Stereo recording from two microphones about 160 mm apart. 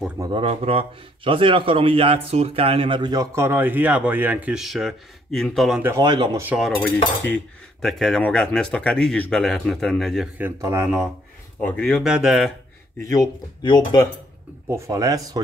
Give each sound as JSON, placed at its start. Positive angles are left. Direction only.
{"t": 0.2, "sound": "speech", "side_deg": -30}
{"t": 5.8, "sound": "speech", "side_deg": -15}
{"t": 6.0, "sound": "speech", "side_deg": -25}
{"t": 6.4, "sound": "speech", "side_deg": -5}
{"t": 7.2, "sound": "speech", "side_deg": 5}
{"t": 11.6, "sound": "speech", "side_deg": 5}
{"t": 13.0, "sound": "speech", "side_deg": 20}
{"t": 14.7, "sound": "speech", "side_deg": -20}